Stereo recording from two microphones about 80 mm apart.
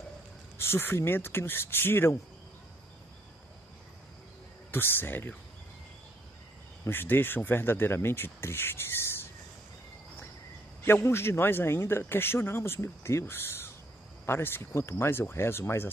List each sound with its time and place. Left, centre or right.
0.6 s speech: left
4.6 s speech: left
6.8 s speech: left
10.8 s a man's voice: left